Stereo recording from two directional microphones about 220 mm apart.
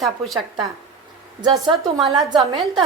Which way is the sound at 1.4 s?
20° right (ahead or behind).